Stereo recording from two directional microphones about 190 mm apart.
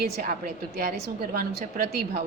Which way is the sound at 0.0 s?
45° right (ahead or behind).